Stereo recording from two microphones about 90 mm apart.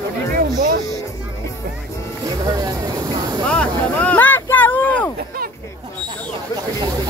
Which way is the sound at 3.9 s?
20° left (ahead or behind).